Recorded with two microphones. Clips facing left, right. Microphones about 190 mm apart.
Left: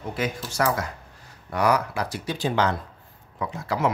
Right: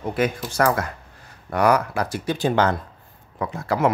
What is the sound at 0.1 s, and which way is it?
Speech, 55° right (ahead or behind).